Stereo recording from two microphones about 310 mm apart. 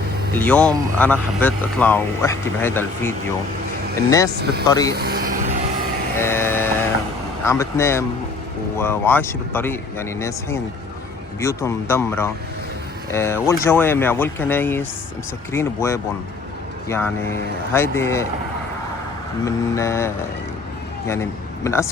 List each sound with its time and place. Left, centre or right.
0.3 s speech: centre
4.9 s vehicle: right
6.1 s sheep: centre
7.4 s speech: centre
17.7 s speech: centre
19.5 s speech: centre
21.1 s speech: centre